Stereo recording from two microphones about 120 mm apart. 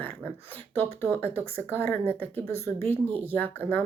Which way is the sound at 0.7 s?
20° left (ahead or behind).